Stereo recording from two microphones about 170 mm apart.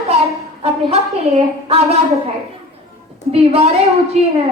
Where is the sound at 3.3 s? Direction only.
35° right (ahead or behind).